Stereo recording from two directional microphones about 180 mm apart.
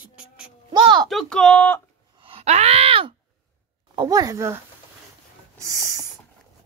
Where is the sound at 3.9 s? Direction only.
20° right (ahead or behind).